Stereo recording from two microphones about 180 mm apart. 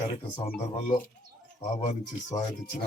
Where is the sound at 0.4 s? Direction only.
30° left (ahead or behind).